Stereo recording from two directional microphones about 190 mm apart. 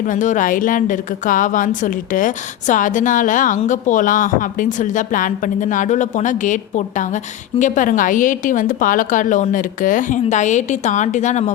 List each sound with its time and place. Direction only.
0.1 s a woman's voice: 40° left (ahead or behind)